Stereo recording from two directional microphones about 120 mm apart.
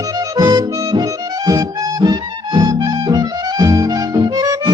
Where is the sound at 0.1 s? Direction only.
30° right (ahead or behind).